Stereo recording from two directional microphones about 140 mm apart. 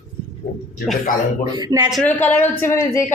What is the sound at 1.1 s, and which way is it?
Speech, 70° left (ahead or behind).